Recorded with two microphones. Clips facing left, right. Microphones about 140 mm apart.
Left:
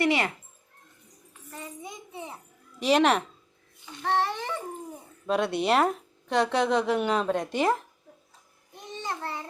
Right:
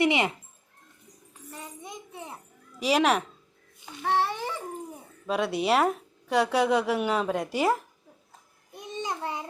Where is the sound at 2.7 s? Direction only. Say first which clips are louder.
Left 1 dB; 5° right (ahead or behind).